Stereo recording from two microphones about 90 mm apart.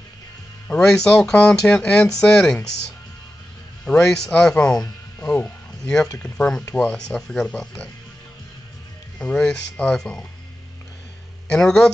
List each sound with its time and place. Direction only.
0.7 s speech: 10° left (ahead or behind)
5.2 s music: 15° left (ahead or behind)
6.1 s speech: 15° left (ahead or behind)
9.2 s speech: 10° left (ahead or behind)
11.4 s speech: 10° left (ahead or behind)